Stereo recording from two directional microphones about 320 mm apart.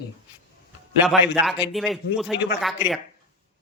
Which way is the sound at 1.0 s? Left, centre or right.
Centre.